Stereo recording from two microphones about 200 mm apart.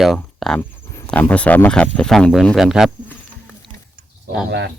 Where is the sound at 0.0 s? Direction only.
Centre (ahead or behind).